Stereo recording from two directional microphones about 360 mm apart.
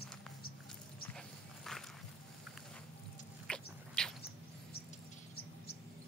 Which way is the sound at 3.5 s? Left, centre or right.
Centre.